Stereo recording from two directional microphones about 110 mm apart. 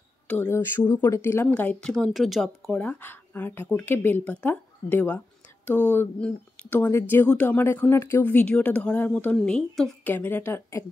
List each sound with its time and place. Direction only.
0.3 s speech: 20° left (ahead or behind)
1.5 s a woman's voice: 10° left (ahead or behind)
2.8 s speech: 15° left (ahead or behind)